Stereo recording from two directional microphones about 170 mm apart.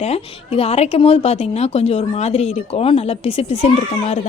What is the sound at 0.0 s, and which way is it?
A woman's voice, 35° left (ahead or behind).